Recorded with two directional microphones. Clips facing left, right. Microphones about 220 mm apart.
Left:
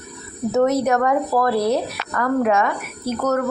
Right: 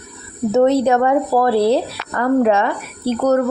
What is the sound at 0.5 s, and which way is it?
Speech, 30° right (ahead or behind).